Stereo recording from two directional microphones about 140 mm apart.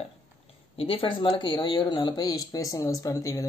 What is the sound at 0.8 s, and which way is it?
Speech, 40° left (ahead or behind).